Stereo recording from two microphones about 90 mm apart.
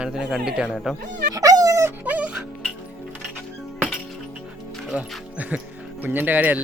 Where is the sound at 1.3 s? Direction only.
40° right (ahead or behind).